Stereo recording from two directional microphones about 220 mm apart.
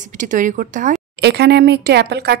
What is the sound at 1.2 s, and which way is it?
Speech, 50° right (ahead or behind).